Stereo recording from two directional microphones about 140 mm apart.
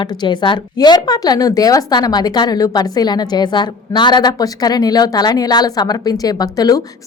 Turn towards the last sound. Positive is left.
turn(degrees=25)  # may be behind; listen again after turning